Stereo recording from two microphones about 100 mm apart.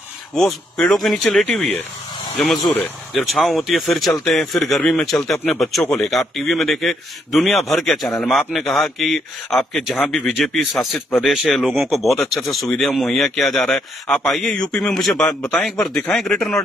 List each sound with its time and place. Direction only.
0.3 s a man's voice: 5° left (ahead or behind)
1.4 s a man's voice: 15° left (ahead or behind)
2.3 s a man's voice: centre (ahead or behind)
10.8 s speech: 20° left (ahead or behind)
11.1 s a man's voice: centre (ahead or behind)